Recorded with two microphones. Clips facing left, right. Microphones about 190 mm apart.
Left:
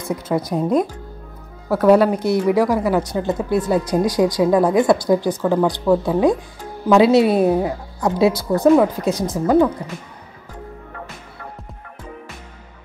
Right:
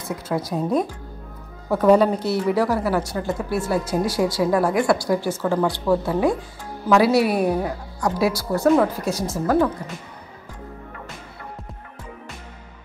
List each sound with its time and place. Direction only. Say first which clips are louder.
0.3 s a woman's voice: left 3 dB; 20° left (ahead or behind)
1.7 s a woman's voice: left 2 dB; 10° left (ahead or behind)